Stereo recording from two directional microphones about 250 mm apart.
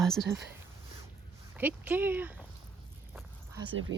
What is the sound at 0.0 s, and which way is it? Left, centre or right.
Speech, centre.